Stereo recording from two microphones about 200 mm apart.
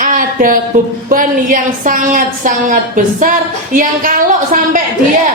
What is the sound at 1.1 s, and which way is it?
A woman's voice, 45° right (ahead or behind).